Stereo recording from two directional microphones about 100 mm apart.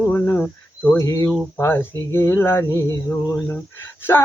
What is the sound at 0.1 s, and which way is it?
Cricket, 20° left (ahead or behind).